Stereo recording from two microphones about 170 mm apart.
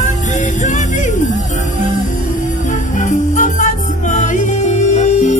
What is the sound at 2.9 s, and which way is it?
Music, 50° left (ahead or behind).